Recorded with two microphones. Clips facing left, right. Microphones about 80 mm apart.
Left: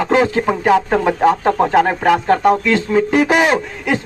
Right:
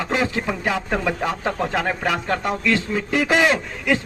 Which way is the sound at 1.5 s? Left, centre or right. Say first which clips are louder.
Left 9 dB; left.